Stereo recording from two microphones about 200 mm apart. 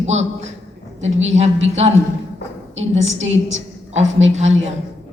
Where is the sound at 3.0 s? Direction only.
70° right (ahead or behind).